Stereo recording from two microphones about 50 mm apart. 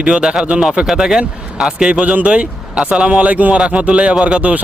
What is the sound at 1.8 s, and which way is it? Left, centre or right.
Speech, right.